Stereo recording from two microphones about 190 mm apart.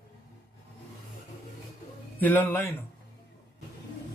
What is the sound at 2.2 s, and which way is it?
Speech, 10° left (ahead or behind).